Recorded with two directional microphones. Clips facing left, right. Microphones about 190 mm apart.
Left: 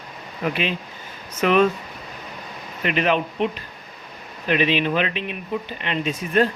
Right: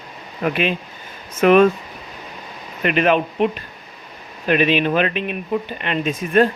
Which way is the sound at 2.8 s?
55° right (ahead or behind).